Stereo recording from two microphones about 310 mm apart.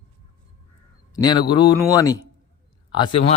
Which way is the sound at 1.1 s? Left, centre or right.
Centre.